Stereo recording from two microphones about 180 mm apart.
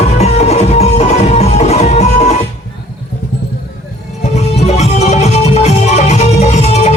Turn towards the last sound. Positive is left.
turn(degrees=35)  # may be behind; listen again after turning